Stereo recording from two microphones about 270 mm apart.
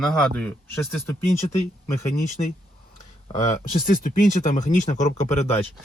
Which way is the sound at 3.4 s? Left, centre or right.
Left.